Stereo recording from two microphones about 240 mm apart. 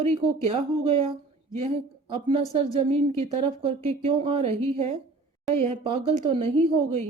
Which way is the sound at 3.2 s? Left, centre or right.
Right.